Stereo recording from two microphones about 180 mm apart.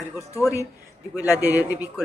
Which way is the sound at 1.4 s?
10° right (ahead or behind).